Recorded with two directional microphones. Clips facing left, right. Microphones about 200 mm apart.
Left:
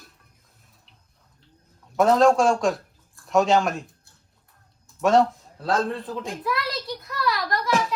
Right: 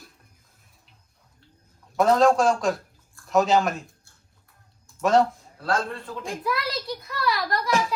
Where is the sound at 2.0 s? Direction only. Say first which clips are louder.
Left 1 dB; centre (ahead or behind).